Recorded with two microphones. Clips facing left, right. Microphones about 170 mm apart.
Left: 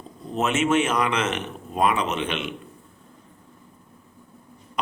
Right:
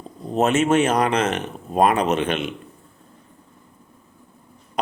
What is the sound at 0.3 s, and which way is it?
A man's voice, 35° right (ahead or behind).